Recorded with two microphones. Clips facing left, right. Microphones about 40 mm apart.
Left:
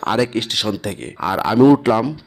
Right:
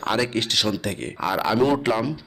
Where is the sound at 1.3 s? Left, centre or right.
Centre.